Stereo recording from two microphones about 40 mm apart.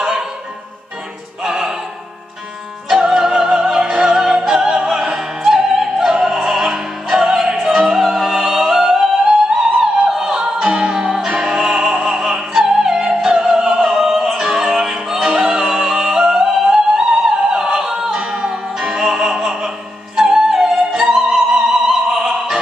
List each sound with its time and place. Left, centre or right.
0.0 s opera: centre
1.4 s opera: centre
3.0 s music: centre
4.4 s opera: centre
7.7 s music: centre
11.8 s opera: right
13.1 s music: centre
21.1 s opera: centre